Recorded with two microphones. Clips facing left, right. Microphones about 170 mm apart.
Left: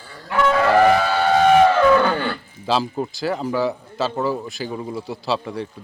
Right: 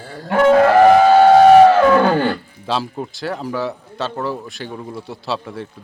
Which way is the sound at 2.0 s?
45° right (ahead or behind).